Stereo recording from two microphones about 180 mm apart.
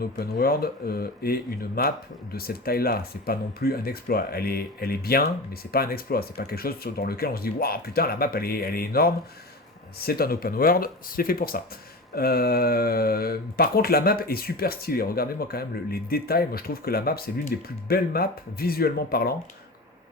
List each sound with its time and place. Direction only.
0.0 s speech: 55° left (ahead or behind)